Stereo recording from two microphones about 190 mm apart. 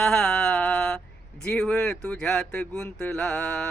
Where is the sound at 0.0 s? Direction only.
5° left (ahead or behind).